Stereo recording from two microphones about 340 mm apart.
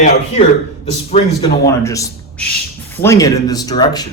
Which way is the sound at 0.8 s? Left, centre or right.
Centre.